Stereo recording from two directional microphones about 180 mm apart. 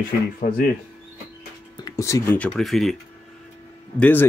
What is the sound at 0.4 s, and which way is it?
Speech, 50° left (ahead or behind).